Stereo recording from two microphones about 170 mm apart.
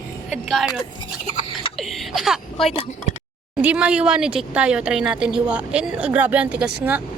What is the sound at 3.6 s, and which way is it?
A woman's voice, 5° right (ahead or behind).